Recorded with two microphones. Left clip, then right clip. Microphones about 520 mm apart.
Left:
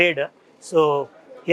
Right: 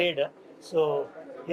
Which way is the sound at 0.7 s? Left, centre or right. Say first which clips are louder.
Left 8 dB; left.